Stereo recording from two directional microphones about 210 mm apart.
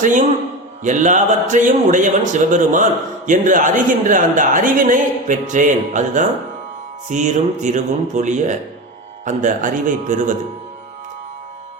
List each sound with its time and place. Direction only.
0.0 s speech: 35° right (ahead or behind)